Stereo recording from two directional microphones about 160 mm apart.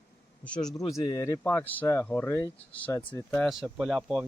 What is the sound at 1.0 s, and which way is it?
Speech, 20° left (ahead or behind).